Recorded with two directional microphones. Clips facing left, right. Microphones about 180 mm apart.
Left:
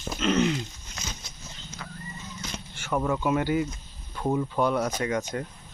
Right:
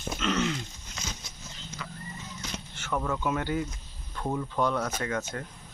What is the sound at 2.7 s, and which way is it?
Speech, 15° left (ahead or behind).